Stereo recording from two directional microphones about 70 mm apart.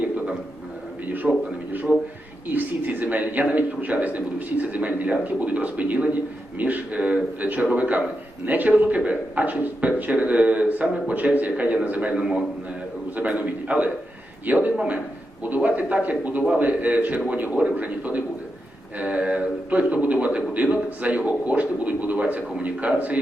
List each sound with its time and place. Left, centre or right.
1.2 s a man's voice: centre
2.5 s a man's voice: right